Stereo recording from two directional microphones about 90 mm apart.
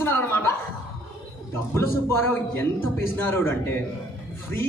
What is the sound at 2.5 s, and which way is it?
A man's voice, 25° left (ahead or behind).